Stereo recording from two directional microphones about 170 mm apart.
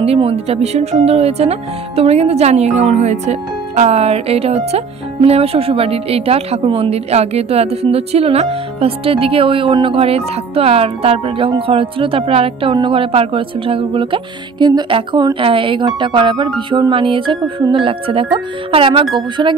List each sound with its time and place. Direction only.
0.0 s speech: 35° right (ahead or behind)